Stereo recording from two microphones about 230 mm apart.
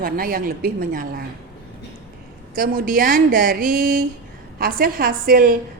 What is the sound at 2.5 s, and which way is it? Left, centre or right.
A woman's voice, right.